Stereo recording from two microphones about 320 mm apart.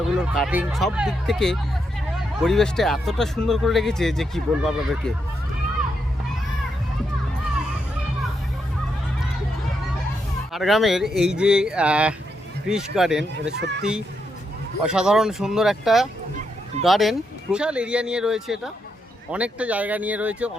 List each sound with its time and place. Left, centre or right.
0.3 s speech: centre
10.5 s speech: centre
13.6 s speech: right
14.8 s speech: centre